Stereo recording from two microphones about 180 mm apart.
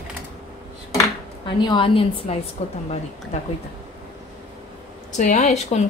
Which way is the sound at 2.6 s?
35° left (ahead or behind).